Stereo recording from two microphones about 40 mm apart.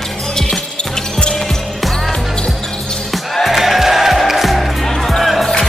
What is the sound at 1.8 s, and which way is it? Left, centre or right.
Music, centre.